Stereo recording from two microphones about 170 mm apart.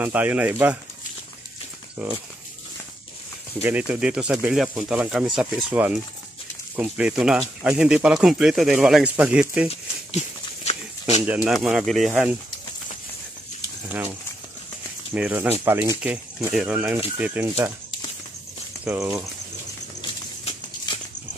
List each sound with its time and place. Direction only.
0.0 s speech: 10° right (ahead or behind)
2.0 s speech: 5° right (ahead or behind)
3.6 s speech: 10° right (ahead or behind)
9.7 s a sound: 40° left (ahead or behind)
11.2 s speech: 5° right (ahead or behind)
15.1 s speech: 5° right (ahead or behind)
18.9 s speech: 20° right (ahead or behind)
20.0 s a sound: 25° left (ahead or behind)